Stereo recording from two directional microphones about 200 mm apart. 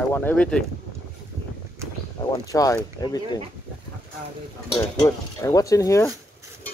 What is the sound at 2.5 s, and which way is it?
Speech, 15° left (ahead or behind).